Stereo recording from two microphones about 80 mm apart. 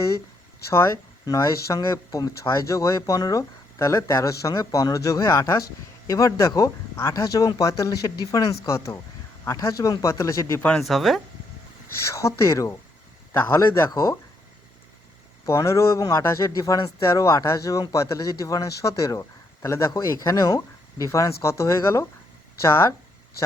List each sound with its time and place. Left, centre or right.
0.7 s speech: left
2.0 s speech: left
2.3 s speech: left
10.8 s speech: centre
12.0 s speech: left
15.4 s speech: left